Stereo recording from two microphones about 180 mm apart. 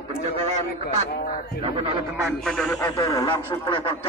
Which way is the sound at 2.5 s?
Centre (ahead or behind).